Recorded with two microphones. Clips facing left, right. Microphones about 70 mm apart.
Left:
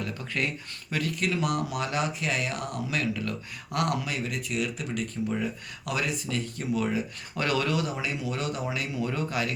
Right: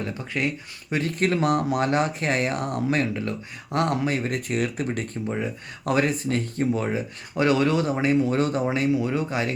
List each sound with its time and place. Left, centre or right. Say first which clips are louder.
0.0 s speech: right 4 dB; right
1.1 s speech: right 7 dB; right
9.0 s speech: right 4 dB; right